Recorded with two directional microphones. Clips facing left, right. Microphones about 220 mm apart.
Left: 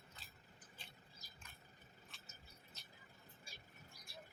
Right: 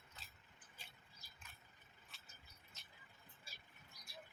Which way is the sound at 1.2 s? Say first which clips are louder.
Left 4 dB; 40° left (ahead or behind).